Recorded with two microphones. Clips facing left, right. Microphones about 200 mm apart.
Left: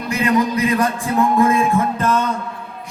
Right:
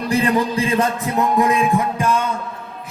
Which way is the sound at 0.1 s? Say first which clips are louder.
Left 1 dB; 30° right (ahead or behind).